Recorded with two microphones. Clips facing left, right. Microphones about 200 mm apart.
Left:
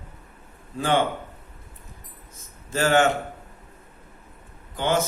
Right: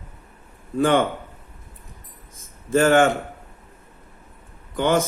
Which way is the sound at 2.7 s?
50° right (ahead or behind).